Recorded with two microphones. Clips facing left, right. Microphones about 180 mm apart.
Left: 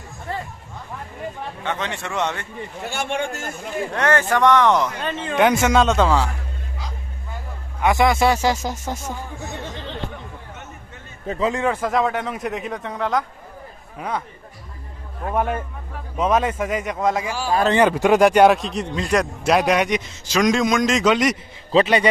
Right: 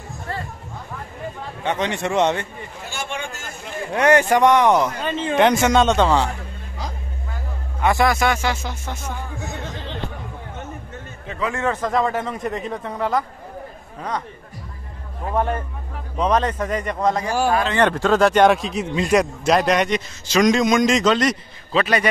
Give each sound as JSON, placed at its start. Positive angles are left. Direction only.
{"t": 0.3, "sound": "a sound", "side_deg": 20}
{"t": 1.6, "sound": "a man's voice", "side_deg": -15}
{"t": 2.9, "sound": "speech", "side_deg": 60}
{"t": 3.9, "sound": "speech", "side_deg": -15}
{"t": 5.4, "sound": "speech", "side_deg": 5}
{"t": 7.8, "sound": "speech", "side_deg": 20}
{"t": 8.3, "sound": "speech", "side_deg": 35}
{"t": 11.2, "sound": "speech", "side_deg": 30}
{"t": 11.5, "sound": "speech", "side_deg": 10}
{"t": 15.3, "sound": "speech", "side_deg": 10}
{"t": 17.3, "sound": "speech", "side_deg": -55}
{"t": 17.7, "sound": "speech", "side_deg": 10}
{"t": 21.7, "sound": "speech", "side_deg": 20}